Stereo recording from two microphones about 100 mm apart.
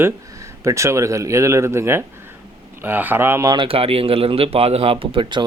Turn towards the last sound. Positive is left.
turn(degrees=-65)  # may be behind; listen again after turning